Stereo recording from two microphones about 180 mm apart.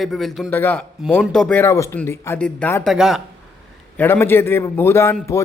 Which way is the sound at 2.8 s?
Centre (ahead or behind).